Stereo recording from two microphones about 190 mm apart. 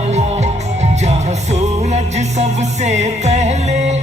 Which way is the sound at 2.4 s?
35° right (ahead or behind).